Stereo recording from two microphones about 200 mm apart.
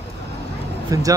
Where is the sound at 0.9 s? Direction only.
15° right (ahead or behind).